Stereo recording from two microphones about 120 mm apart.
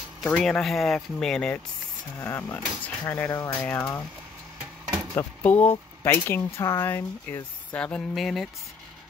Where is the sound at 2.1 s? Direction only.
20° left (ahead or behind).